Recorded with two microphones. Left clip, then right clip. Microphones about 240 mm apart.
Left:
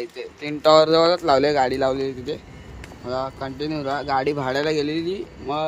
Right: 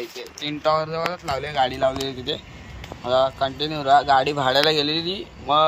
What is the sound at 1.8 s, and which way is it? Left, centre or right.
Speech, left.